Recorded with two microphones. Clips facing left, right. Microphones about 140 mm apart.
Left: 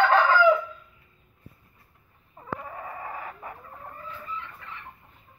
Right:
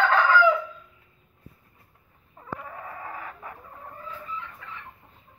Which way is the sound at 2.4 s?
20° left (ahead or behind).